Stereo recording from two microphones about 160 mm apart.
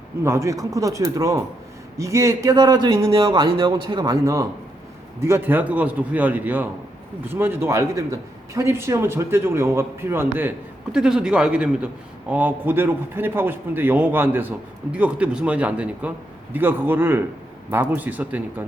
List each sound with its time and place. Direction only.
0.3 s a man's voice: 20° right (ahead or behind)